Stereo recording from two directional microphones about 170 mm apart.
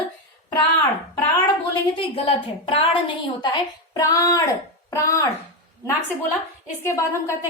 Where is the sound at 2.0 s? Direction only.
30° left (ahead or behind).